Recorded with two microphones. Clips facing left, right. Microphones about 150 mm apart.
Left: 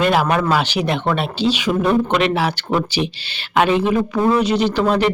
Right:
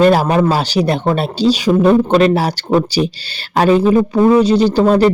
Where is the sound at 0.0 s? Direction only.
35° right (ahead or behind).